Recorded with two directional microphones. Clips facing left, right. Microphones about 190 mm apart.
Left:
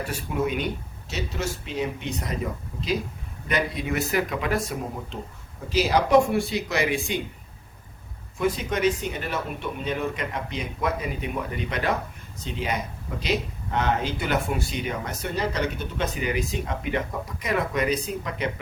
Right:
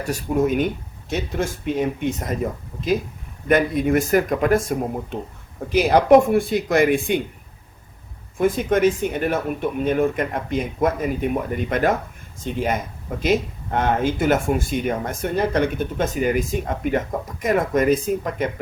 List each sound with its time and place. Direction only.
0.0 s speech: 45° right (ahead or behind)
8.4 s speech: 50° right (ahead or behind)